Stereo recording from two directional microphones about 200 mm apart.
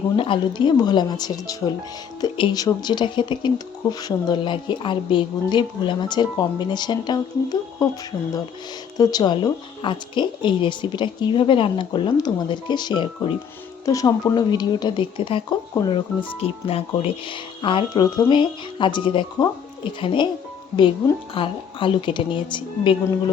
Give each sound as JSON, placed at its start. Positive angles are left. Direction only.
{"t": 0.2, "sound": "speech", "side_deg": 25}
{"t": 9.0, "sound": "speech", "side_deg": 20}
{"t": 21.3, "sound": "speech", "side_deg": 25}